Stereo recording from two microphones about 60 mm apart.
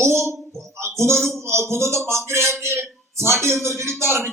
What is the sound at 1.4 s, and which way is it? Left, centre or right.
A man's voice, right.